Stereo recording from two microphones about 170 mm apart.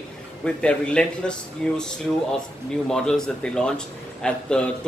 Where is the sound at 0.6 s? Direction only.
5° left (ahead or behind).